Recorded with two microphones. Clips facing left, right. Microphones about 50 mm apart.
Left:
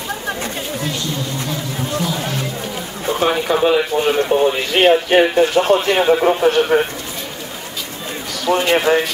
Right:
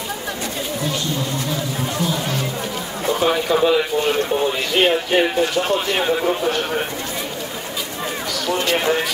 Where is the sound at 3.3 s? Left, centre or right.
Centre.